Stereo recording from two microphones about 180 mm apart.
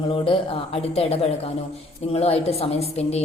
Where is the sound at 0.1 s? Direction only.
30° left (ahead or behind).